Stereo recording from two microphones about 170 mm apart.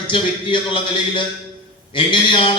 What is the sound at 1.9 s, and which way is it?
Speech, 30° left (ahead or behind).